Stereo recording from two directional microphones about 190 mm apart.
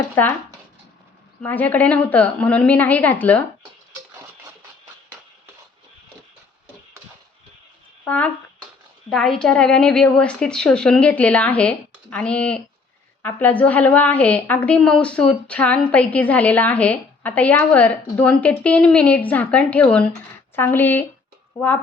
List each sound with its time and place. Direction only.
0.2 s a woman's voice: 10° left (ahead or behind)
1.4 s a woman's voice: 10° left (ahead or behind)
8.0 s a woman's voice: 10° left (ahead or behind)